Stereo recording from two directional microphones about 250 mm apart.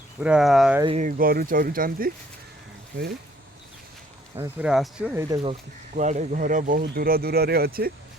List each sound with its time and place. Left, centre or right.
0.2 s speech: centre
0.8 s speech: right
1.0 s speech: right
4.4 s speech: centre
6.0 s speech: right